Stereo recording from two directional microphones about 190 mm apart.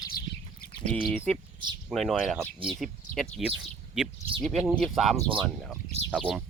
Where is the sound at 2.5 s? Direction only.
30° right (ahead or behind).